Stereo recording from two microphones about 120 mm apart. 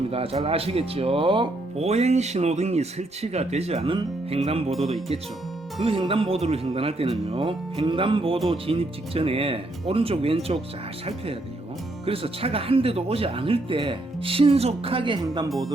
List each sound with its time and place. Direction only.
0.1 s speech: 55° right (ahead or behind)
1.9 s speech: 65° right (ahead or behind)
6.1 s speech: 50° right (ahead or behind)
12.0 s speech: 50° right (ahead or behind)
15.4 s speech: centre (ahead or behind)